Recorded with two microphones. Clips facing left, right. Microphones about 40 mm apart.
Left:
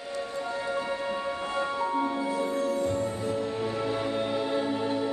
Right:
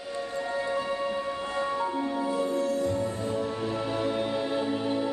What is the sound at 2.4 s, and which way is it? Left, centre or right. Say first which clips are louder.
Music: even; left.